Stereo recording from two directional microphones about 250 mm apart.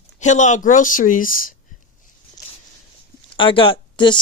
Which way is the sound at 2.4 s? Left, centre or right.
Centre.